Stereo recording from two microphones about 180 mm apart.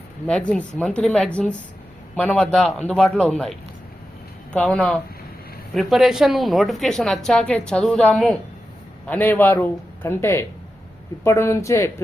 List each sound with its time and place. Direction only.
0.3 s a man's voice: 5° left (ahead or behind)